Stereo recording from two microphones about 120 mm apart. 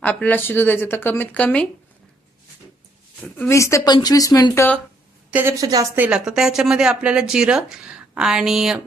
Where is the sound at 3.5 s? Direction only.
25° left (ahead or behind).